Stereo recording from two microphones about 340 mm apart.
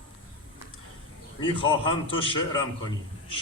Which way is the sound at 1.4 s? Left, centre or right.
Centre.